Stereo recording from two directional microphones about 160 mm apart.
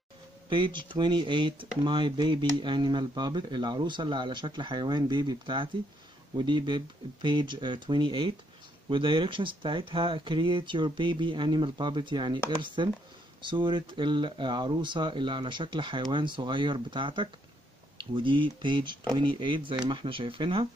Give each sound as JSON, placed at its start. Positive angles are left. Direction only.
{"t": 0.5, "sound": "speech", "side_deg": -30}